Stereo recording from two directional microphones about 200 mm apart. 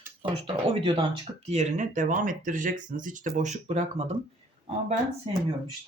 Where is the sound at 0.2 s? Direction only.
25° right (ahead or behind).